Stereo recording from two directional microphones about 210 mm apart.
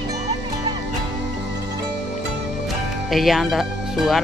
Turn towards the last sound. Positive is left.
turn(degrees=0)  # may be behind; listen again after turning